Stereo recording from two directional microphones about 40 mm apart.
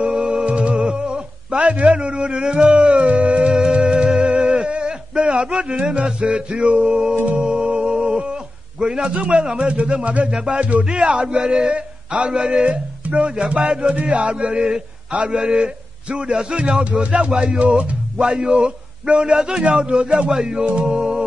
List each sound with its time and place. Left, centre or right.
0.0 s music: right
1.6 s music: right
4.6 s speech: right
7.4 s a sound: right
9.2 s a man's voice: centre
9.6 s a man's voice: right
18.1 s a man's voice: centre
20.2 s music: centre
20.8 s a sound: centre